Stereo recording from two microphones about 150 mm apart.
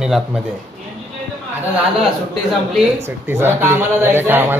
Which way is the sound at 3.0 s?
15° right (ahead or behind).